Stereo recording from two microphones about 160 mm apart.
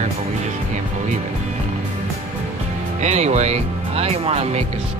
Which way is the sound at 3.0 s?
45° right (ahead or behind).